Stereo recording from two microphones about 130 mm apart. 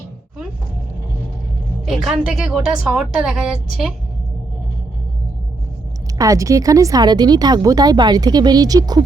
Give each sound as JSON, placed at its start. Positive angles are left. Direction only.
{"t": 1.9, "sound": "a woman's voice", "side_deg": -5}
{"t": 6.1, "sound": "speech", "side_deg": -25}